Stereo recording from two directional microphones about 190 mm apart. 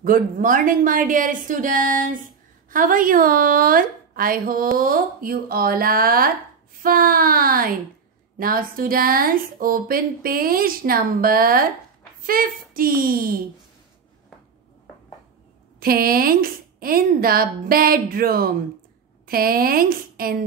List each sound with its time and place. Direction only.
0.0 s a woman's voice: 45° right (ahead or behind)
15.8 s a woman's voice: 50° right (ahead or behind)